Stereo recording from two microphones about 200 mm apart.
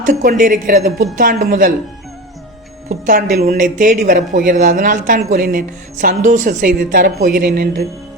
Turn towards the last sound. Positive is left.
turn(degrees=-50)  # may be behind; listen again after turning